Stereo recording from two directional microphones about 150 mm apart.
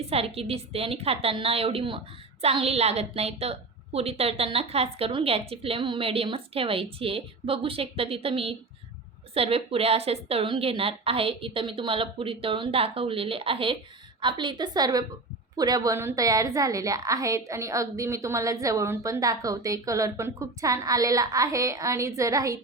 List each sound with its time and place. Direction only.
0.1 s a woman's voice: 40° right (ahead or behind); by 22.6 s 20° right (ahead or behind)